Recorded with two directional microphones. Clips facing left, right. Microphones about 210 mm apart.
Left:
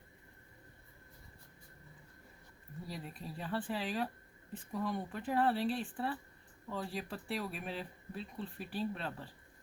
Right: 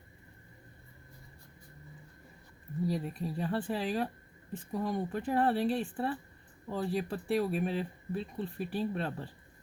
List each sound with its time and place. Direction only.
2.8 s speech: 45° right (ahead or behind)